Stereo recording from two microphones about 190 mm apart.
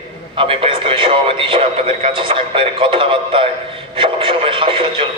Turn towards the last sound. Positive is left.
turn(degrees=-25)  # may be behind; listen again after turning